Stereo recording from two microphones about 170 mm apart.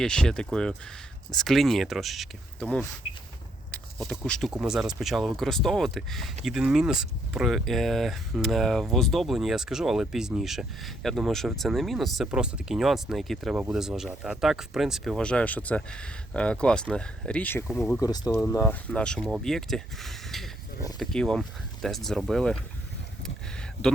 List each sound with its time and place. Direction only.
0.0 s speech: 5° left (ahead or behind)
17.9 s speech: 20° left (ahead or behind)
18.9 s speech: 5° left (ahead or behind)